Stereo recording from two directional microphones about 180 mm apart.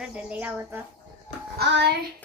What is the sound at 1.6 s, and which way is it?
Child singing, 70° right (ahead or behind).